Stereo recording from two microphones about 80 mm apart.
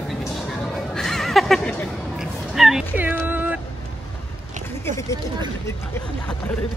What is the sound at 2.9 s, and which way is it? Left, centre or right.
Music, right.